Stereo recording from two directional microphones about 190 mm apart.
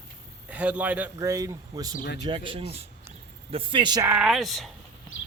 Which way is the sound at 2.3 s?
25° right (ahead or behind).